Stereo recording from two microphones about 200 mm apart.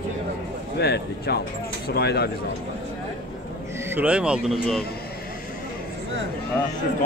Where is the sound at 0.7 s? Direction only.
55° left (ahead or behind).